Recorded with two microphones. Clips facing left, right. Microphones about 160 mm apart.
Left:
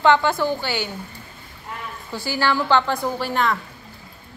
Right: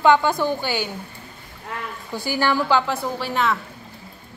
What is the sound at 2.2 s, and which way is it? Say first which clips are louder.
A woman's voice: right 1 dB; 15° right (ahead or behind).